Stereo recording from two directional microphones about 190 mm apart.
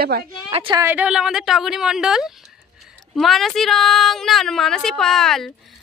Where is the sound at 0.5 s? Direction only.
25° right (ahead or behind).